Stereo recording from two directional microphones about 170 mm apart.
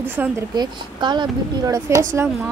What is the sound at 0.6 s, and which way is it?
A woman's voice, 25° right (ahead or behind).